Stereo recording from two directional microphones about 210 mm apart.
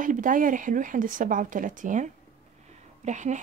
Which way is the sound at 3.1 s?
35° right (ahead or behind).